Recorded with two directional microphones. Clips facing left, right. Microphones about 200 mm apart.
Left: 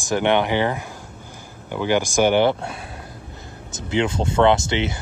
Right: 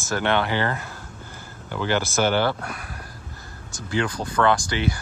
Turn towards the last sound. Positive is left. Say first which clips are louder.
# left 3 dB
turn(degrees=25)  # may be behind; listen again after turning